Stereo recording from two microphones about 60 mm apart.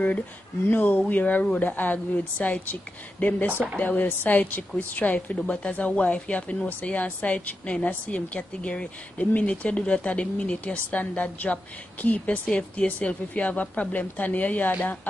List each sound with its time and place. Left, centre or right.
0.7 s a woman's voice: left